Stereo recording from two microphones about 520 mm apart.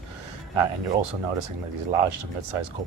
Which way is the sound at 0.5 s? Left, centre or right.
Right.